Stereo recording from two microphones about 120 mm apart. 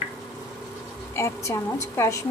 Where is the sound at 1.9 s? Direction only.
25° left (ahead or behind).